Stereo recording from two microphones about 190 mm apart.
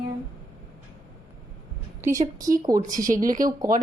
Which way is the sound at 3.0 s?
45° right (ahead or behind).